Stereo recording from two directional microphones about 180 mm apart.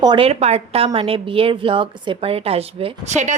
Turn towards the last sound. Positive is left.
turn(degrees=-40)  # may be behind; listen again after turning